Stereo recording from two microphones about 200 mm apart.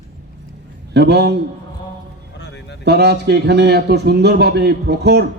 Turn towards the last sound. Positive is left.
turn(degrees=-55)  # may be behind; listen again after turning